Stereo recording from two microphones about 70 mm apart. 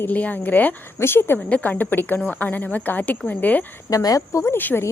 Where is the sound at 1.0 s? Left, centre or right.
Left.